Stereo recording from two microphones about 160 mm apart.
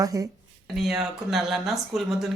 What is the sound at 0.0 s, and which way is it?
Speech, 20° right (ahead or behind).